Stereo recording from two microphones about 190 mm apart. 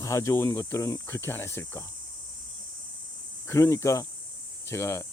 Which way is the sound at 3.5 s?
15° left (ahead or behind).